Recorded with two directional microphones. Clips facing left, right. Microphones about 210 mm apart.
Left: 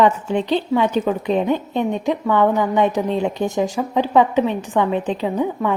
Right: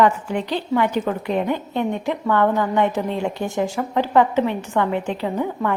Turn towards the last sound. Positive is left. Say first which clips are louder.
# left 2 dB
turn(degrees=15)  # may be behind; listen again after turning